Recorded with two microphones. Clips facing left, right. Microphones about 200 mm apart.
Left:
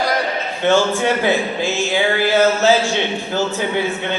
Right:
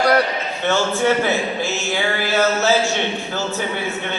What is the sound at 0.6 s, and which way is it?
A man's voice, 15° left (ahead or behind).